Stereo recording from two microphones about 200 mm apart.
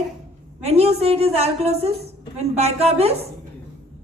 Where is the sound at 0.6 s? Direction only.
30° right (ahead or behind).